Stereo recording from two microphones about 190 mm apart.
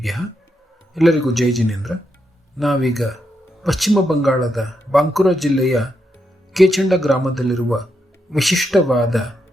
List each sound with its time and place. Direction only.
0.9 s a man's voice: centre (ahead or behind)